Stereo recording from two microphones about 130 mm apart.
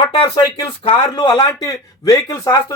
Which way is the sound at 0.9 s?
35° left (ahead or behind).